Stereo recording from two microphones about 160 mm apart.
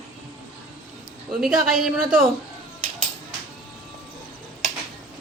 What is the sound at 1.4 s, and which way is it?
Speech, centre (ahead or behind).